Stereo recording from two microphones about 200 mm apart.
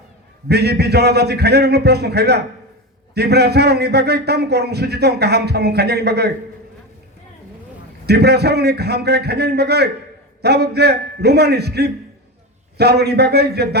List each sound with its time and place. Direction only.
0.4 s a man's voice: 55° right (ahead or behind)
8.0 s a man's voice: 55° right (ahead or behind)